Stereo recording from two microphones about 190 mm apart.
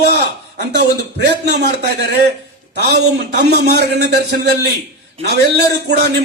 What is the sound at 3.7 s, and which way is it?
Speech, 60° right (ahead or behind).